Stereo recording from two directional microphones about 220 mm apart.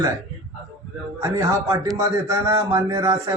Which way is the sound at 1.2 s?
15° right (ahead or behind).